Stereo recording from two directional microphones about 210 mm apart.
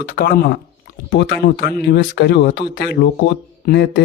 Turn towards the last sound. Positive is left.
turn(degrees=50)  # may be behind; listen again after turning